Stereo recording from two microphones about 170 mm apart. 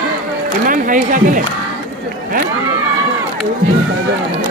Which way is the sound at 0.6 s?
55° right (ahead or behind).